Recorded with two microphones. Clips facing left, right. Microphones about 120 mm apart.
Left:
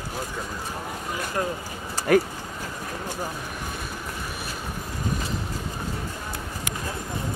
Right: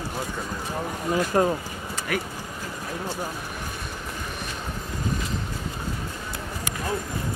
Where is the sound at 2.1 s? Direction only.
40° left (ahead or behind).